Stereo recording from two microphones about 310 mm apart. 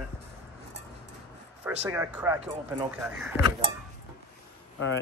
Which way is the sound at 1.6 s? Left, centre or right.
Centre.